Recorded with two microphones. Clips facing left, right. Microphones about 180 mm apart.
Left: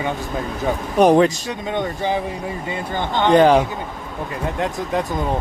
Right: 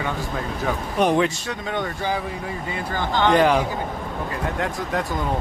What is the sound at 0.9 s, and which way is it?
Speech, 40° left (ahead or behind).